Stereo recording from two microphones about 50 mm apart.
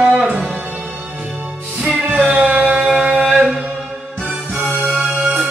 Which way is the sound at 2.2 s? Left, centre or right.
Right.